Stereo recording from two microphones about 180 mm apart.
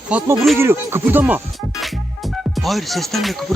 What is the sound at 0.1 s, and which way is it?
Speech, 5° right (ahead or behind).